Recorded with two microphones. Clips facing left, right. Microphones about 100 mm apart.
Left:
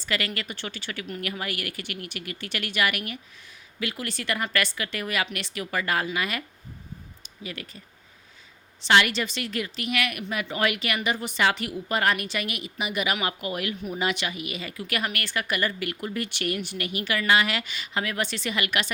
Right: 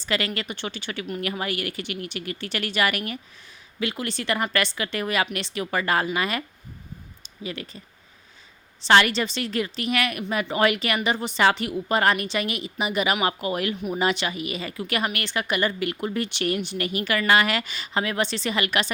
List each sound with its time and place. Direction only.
0.0 s a woman's voice: 25° right (ahead or behind)
8.8 s a woman's voice: 35° right (ahead or behind)
16.7 s a woman's voice: 40° right (ahead or behind)